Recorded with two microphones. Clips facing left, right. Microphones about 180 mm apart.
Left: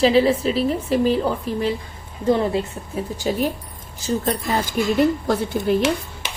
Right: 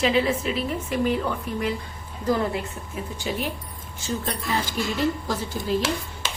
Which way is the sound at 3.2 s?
40° left (ahead or behind).